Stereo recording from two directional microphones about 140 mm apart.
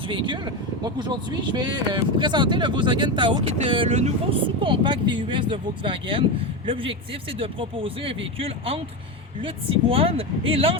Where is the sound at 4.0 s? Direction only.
55° right (ahead or behind).